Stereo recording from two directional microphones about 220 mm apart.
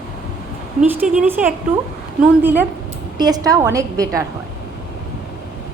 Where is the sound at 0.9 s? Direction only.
5° right (ahead or behind).